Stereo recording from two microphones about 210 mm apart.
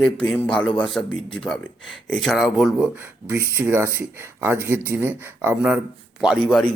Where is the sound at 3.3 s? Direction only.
10° right (ahead or behind).